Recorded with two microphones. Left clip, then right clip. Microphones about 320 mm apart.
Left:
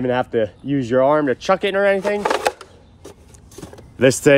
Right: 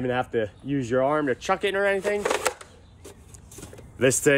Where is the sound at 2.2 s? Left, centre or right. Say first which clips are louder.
Left 6 dB; centre.